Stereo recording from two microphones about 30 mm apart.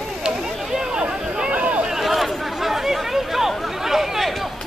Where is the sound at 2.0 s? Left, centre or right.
Centre.